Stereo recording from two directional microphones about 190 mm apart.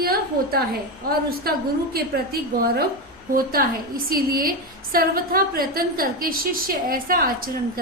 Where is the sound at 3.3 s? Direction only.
50° right (ahead or behind).